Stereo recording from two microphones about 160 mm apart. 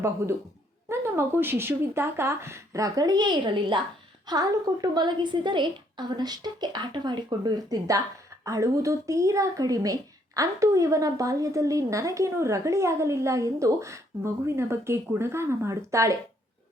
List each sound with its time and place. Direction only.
0.2 s speech: 15° right (ahead or behind)